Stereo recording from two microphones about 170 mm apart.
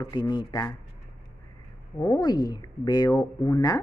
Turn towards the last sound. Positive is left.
turn(degrees=20)  # may be behind; listen again after turning